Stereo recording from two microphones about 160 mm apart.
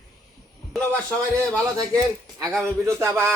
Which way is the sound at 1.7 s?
20° right (ahead or behind).